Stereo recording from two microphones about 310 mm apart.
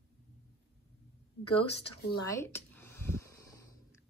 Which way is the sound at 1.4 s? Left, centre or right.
Centre.